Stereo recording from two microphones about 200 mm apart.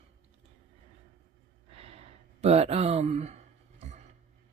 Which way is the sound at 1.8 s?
30° right (ahead or behind).